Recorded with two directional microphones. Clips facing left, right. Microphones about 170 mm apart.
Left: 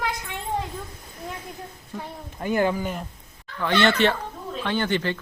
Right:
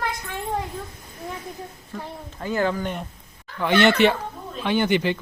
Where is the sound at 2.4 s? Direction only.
15° left (ahead or behind).